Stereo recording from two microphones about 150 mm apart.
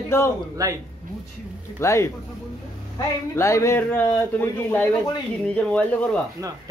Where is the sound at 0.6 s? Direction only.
25° right (ahead or behind).